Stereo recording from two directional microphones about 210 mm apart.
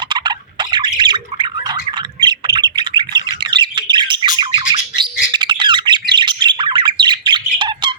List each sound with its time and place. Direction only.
0.1 s squawk: 20° right (ahead or behind)
5.3 s bird: 20° right (ahead or behind)